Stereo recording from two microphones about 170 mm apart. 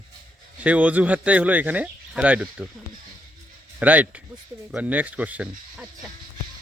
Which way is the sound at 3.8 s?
10° right (ahead or behind).